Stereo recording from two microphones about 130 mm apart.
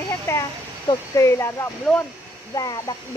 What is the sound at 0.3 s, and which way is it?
Speech, 20° left (ahead or behind).